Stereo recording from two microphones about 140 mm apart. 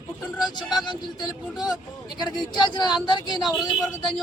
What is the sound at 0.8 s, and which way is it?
Speech, 30° left (ahead or behind).